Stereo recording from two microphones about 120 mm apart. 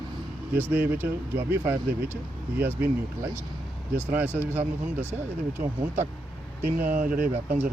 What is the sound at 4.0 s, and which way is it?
Speech, 15° right (ahead or behind).